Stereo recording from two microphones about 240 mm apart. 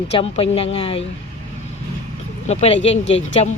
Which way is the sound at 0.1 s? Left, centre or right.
Left.